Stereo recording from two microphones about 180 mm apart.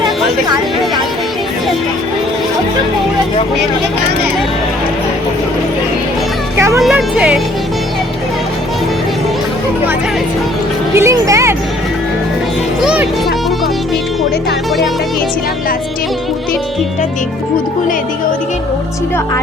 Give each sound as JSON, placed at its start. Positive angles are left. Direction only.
{"t": 6.7, "sound": "speech", "side_deg": -5}
{"t": 10.9, "sound": "speech", "side_deg": -15}
{"t": 12.8, "sound": "speech", "side_deg": -5}